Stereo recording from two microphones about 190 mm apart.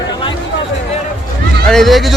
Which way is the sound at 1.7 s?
Centre (ahead or behind).